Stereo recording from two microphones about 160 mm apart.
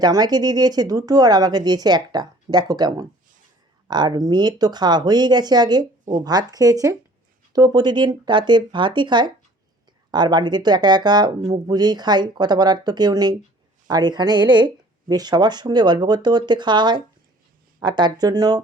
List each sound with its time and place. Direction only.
0.0 s speech: 25° right (ahead or behind)